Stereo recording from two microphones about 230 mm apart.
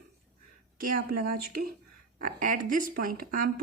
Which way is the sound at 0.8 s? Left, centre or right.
Right.